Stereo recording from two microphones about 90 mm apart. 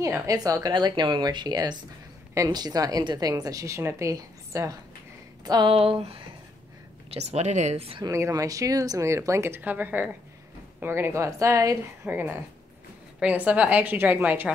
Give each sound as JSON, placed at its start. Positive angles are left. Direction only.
{"t": 0.0, "sound": "a woman's voice", "side_deg": -35}
{"t": 5.4, "sound": "a sound", "side_deg": -50}
{"t": 5.7, "sound": "speech", "side_deg": -90}
{"t": 8.1, "sound": "a woman's voice", "side_deg": -35}
{"t": 12.1, "sound": "a woman's voice", "side_deg": -20}